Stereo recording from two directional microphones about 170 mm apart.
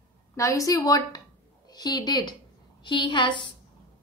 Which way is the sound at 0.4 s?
20° left (ahead or behind).